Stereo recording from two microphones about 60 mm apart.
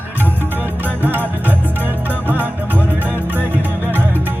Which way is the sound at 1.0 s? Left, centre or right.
Right.